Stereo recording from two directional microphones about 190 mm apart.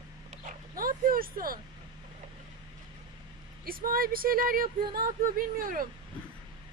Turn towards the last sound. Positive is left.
turn(degrees=-50)  # may be behind; listen again after turning